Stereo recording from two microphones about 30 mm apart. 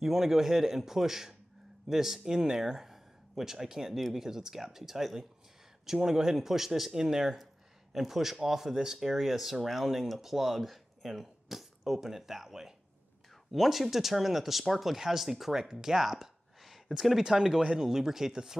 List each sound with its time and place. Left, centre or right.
0.0 s speech: centre
17.3 s speech: centre